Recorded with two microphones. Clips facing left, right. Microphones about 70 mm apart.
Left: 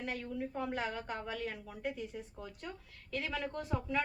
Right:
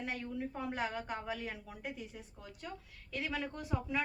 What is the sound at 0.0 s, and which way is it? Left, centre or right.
A woman's voice, centre.